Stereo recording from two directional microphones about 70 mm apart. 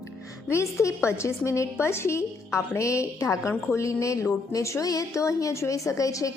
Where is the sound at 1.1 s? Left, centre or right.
Left.